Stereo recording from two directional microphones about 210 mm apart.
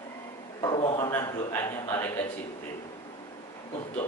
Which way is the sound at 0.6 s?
25° left (ahead or behind).